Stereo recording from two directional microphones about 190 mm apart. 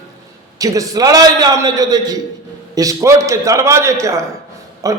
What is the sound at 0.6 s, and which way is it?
A man's voice, 20° right (ahead or behind).